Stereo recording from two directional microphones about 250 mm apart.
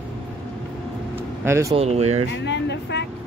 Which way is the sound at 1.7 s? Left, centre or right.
Right.